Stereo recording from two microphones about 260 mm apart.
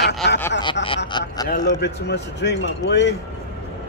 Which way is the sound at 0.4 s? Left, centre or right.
Centre.